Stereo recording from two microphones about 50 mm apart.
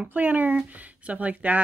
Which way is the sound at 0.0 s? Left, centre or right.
Right.